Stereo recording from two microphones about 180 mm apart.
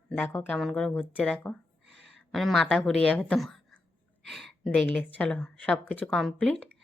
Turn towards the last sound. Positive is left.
turn(degrees=5)  # may be behind; listen again after turning